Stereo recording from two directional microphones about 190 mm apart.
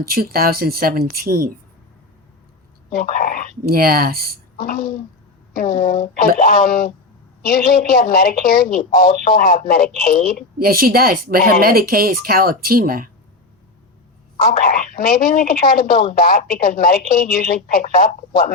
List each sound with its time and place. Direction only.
0.0 s speech: 50° right (ahead or behind)
2.9 s speech: 45° left (ahead or behind)
3.6 s speech: 50° right (ahead or behind)
4.5 s a woman's voice: 50° left (ahead or behind)
10.6 s speech: 50° right (ahead or behind)
14.7 s speech: 45° left (ahead or behind)